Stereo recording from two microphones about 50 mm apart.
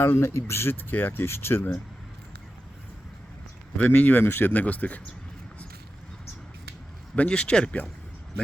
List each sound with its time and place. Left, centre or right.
0.0 s speech: left
0.3 s speech: left
1.2 s speech: left
3.8 s speech: left
4.3 s speech: left
4.6 s speech: left
7.3 s speech: centre